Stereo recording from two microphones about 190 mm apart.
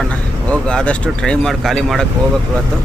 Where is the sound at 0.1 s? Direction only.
5° left (ahead or behind).